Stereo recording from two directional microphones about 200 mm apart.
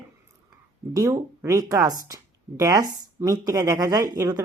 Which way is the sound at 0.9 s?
15° right (ahead or behind).